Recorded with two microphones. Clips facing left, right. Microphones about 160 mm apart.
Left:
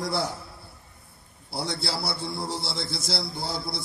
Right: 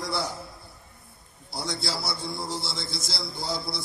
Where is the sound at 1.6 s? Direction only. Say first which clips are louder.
Left 1 dB; 65° left (ahead or behind).